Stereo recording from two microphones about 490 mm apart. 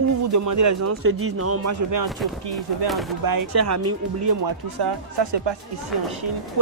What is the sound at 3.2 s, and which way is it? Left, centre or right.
Speech, right.